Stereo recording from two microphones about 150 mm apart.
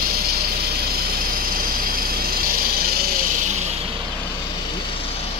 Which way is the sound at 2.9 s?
75° right (ahead or behind).